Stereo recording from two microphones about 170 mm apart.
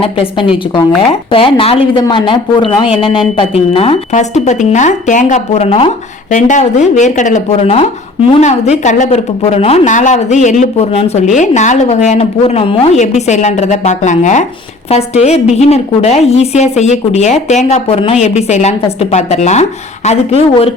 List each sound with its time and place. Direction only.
0.0 s a woman's voice: 30° left (ahead or behind)